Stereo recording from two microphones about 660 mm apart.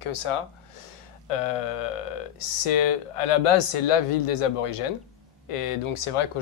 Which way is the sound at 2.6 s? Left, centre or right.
Left.